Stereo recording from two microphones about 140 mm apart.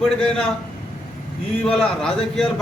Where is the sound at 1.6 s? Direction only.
5° left (ahead or behind).